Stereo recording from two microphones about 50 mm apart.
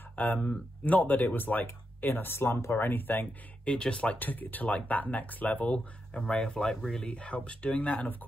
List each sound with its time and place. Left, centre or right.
0.1 s speech: left
3.6 s speech: left
4.2 s speech: left
6.1 s speech: centre
7.0 s speech: left